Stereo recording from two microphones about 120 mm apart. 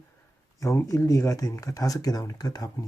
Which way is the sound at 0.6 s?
25° left (ahead or behind).